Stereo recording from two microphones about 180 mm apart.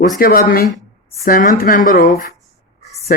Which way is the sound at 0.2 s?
55° left (ahead or behind).